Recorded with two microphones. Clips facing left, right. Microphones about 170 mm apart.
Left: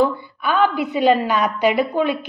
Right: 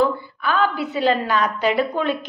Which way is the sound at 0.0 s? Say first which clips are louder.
Left 1 dB; 15° left (ahead or behind).